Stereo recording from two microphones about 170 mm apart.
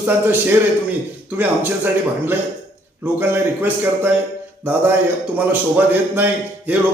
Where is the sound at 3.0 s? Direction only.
10° right (ahead or behind).